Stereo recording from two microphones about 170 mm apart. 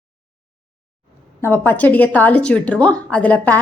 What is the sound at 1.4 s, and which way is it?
A woman's voice, 10° left (ahead or behind).